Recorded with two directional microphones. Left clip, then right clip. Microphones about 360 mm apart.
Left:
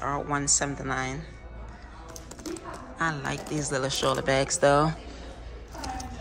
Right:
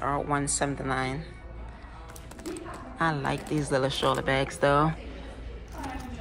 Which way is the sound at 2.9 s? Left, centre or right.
Centre.